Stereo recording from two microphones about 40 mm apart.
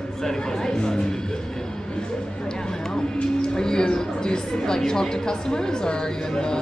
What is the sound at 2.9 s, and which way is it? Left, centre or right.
A woman's voice, centre.